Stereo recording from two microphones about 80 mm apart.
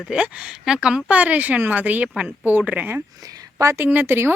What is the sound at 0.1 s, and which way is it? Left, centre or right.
Speech, centre.